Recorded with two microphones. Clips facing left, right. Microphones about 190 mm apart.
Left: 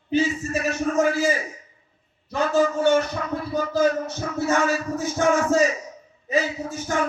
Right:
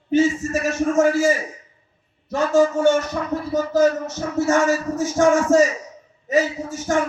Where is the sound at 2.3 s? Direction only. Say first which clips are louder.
Right 4 dB; 45° right (ahead or behind).